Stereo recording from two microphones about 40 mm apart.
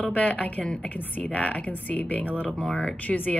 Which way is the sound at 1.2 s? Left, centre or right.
Left.